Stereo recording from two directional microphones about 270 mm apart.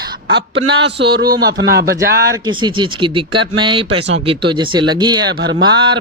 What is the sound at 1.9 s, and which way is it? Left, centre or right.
Speech, centre.